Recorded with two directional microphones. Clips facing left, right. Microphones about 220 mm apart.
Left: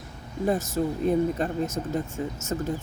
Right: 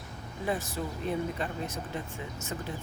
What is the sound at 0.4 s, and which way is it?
Speech, 45° left (ahead or behind).